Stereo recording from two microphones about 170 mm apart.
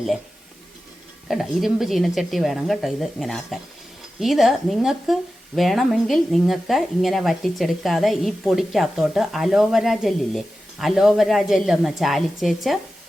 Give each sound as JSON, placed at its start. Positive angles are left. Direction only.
{"t": 1.3, "sound": "speech", "side_deg": 0}